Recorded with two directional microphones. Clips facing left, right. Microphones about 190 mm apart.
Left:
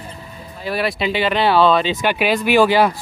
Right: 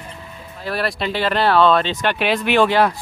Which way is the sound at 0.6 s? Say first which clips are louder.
Left 2 dB; centre (ahead or behind).